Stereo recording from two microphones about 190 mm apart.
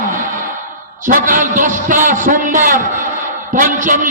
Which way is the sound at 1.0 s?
45° right (ahead or behind).